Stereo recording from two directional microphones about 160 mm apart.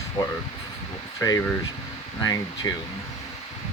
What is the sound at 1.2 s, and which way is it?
Speech, 20° left (ahead or behind).